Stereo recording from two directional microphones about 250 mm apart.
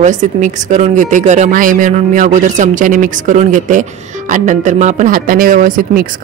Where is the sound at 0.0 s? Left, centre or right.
Right.